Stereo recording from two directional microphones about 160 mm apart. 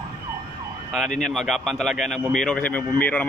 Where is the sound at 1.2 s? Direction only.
Centre (ahead or behind).